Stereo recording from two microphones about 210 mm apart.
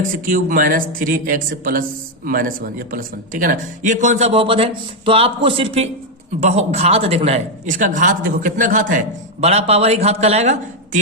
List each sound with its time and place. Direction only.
0.3 s a man's voice: 40° right (ahead or behind)